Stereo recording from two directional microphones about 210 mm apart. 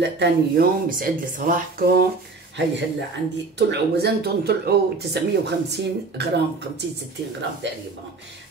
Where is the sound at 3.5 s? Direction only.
55° right (ahead or behind).